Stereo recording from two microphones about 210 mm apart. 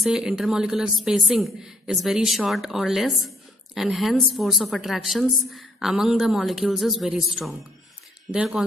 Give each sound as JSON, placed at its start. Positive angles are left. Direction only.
{"t": 0.0, "sound": "a woman's voice", "side_deg": 0}